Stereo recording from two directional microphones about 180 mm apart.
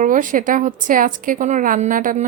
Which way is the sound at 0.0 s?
45° right (ahead or behind).